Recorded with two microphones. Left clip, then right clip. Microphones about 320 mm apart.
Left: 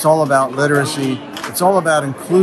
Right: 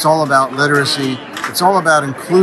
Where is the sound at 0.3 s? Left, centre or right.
Centre.